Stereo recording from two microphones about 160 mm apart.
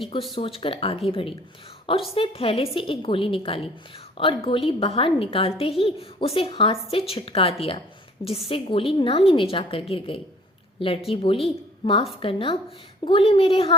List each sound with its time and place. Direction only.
0.3 s a woman's voice: 35° left (ahead or behind)